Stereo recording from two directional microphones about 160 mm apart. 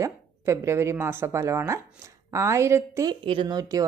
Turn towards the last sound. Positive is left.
turn(degrees=-20)  # may be behind; listen again after turning